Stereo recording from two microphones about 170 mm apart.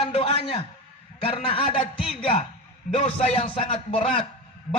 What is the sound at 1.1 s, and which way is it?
Music, 30° left (ahead or behind).